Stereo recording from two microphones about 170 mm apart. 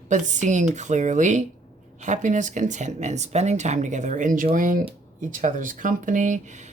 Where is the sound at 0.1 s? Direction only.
45° right (ahead or behind).